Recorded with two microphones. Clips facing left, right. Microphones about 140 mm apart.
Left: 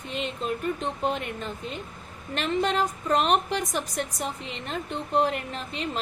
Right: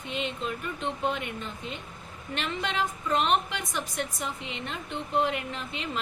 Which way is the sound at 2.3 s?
40° left (ahead or behind).